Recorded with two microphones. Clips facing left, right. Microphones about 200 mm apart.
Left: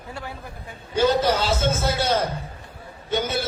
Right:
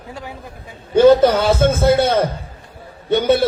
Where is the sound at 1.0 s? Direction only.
55° right (ahead or behind).